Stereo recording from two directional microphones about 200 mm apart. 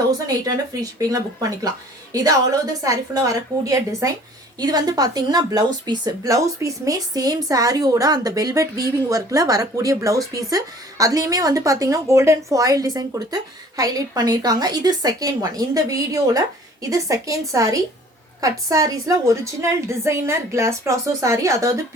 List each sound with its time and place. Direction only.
0.3 s a woman's voice: 20° right (ahead or behind)